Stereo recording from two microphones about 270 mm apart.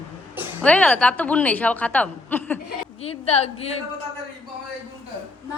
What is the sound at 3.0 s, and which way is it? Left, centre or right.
Speech, left.